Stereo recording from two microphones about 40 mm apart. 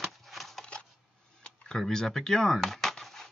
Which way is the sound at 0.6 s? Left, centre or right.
Left.